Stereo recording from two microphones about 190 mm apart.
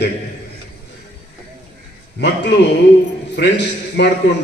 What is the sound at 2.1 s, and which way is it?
A man's voice, 65° left (ahead or behind).